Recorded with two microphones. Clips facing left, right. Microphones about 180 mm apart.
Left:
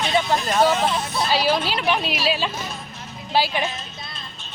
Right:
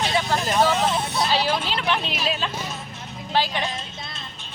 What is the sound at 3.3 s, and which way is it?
Music, 10° left (ahead or behind).